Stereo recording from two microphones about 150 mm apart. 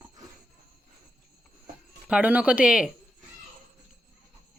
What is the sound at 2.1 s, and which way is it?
Speech, 10° right (ahead or behind).